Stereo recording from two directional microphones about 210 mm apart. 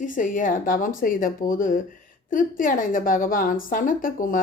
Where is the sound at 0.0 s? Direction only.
40° left (ahead or behind).